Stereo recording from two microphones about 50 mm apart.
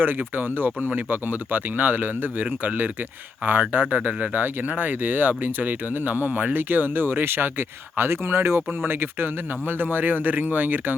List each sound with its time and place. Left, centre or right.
0.0 s speech: right